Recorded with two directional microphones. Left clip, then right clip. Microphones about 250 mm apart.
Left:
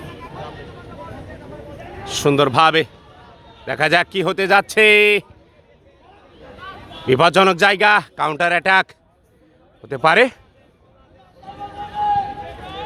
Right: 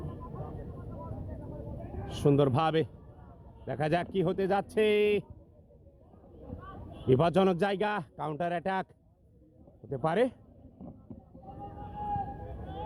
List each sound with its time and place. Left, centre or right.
2.0 s a man's voice: centre
7.1 s a man's voice: centre